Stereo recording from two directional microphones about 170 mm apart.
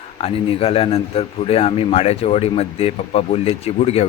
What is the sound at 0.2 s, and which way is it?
Speech, 35° left (ahead or behind).